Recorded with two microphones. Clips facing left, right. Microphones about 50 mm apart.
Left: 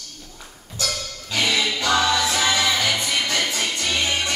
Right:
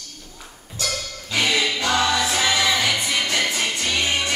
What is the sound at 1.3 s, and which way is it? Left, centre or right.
Music, right.